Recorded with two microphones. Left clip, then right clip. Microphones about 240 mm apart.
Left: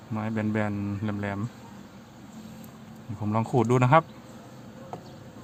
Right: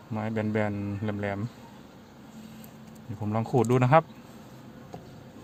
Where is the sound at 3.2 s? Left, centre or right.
Centre.